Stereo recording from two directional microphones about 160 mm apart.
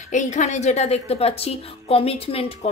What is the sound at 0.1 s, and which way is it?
A woman's voice, 50° left (ahead or behind).